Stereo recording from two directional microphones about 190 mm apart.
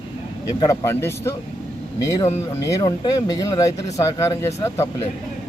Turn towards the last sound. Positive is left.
turn(degrees=15)  # may be behind; listen again after turning